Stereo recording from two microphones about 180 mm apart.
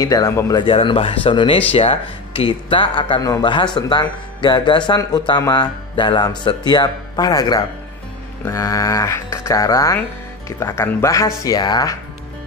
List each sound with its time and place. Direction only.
0.0 s speech: 15° left (ahead or behind)